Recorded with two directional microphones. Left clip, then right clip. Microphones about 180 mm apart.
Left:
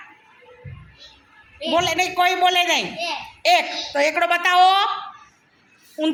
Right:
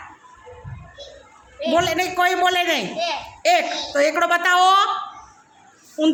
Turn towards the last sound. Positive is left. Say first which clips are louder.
# right 3 dB
turn(degrees=-20)  # may be behind; listen again after turning